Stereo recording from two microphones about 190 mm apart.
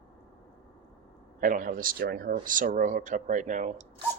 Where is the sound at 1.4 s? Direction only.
45° right (ahead or behind).